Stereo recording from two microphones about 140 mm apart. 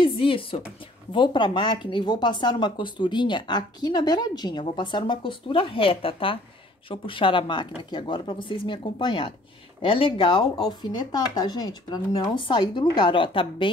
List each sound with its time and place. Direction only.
0.0 s a woman's voice: 40° left (ahead or behind)